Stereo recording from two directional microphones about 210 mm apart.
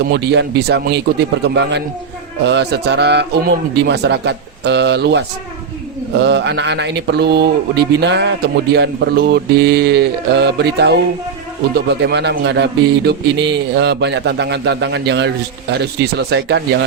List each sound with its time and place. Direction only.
0.0 s speech: 50° right (ahead or behind)
2.4 s speech: 55° right (ahead or behind)